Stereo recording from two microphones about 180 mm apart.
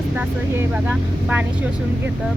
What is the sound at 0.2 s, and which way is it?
Speech, 10° right (ahead or behind).